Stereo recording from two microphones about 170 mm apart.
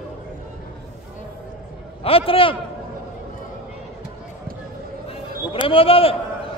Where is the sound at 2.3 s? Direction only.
30° left (ahead or behind).